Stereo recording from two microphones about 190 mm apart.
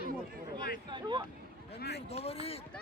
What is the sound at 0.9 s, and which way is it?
Speech, 25° right (ahead or behind).